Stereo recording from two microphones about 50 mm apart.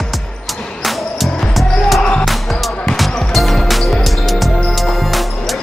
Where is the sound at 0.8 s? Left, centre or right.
Centre.